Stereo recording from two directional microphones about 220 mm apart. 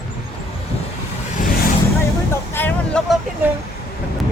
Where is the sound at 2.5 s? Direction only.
10° left (ahead or behind).